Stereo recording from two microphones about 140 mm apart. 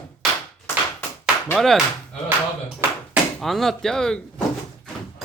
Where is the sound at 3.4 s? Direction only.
Centre (ahead or behind).